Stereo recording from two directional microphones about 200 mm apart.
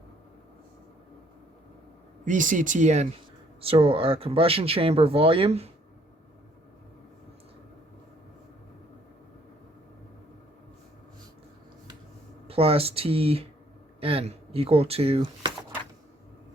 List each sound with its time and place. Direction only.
2.2 s speech: 40° right (ahead or behind)
12.5 s speech: 30° right (ahead or behind)